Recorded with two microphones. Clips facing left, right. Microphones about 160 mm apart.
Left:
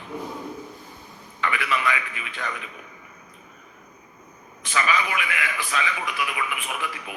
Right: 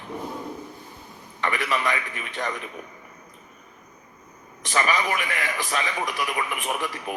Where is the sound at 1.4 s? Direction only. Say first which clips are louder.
Even; 40° right (ahead or behind).